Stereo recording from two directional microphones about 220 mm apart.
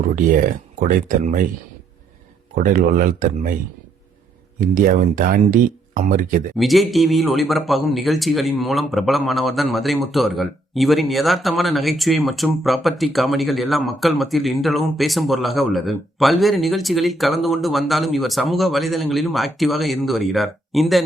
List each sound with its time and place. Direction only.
0.8 s speech: 40° right (ahead or behind)
2.6 s speech: 35° right (ahead or behind)
4.6 s speech: 40° right (ahead or behind)
6.6 s a man's voice: centre (ahead or behind)